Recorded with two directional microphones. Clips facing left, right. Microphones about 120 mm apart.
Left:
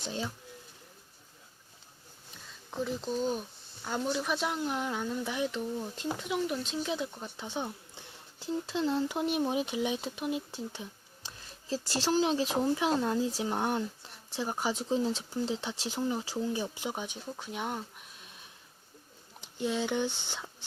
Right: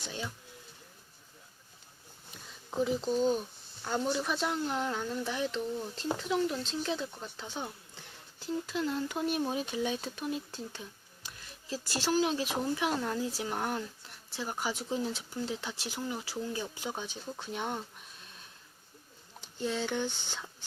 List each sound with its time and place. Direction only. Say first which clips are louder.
0.0 s speech: left 4 dB; 30° left (ahead or behind)
2.6 s speech: right 4 dB; 5° right (ahead or behind); by 10.8 s 20° left (ahead or behind)
11.7 s speech: left 2 dB; 35° left (ahead or behind); by 17.8 s 5° left (ahead or behind)
19.4 s speech: left 2 dB; 15° left (ahead or behind)